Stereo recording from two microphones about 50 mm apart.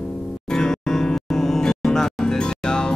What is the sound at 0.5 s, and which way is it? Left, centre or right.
Music, centre.